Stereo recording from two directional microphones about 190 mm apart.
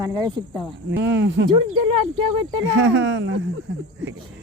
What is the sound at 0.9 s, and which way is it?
Speech, 65° right (ahead or behind).